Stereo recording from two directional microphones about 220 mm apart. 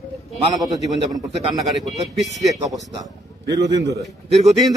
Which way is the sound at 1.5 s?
Centre (ahead or behind).